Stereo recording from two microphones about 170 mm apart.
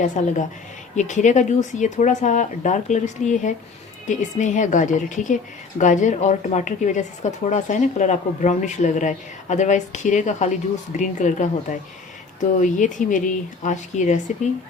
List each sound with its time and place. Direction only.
0.2 s a woman's voice: 45° left (ahead or behind)